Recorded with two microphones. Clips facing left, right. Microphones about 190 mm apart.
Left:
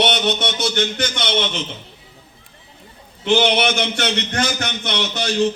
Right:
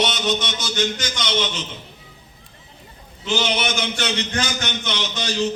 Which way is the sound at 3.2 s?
60° left (ahead or behind).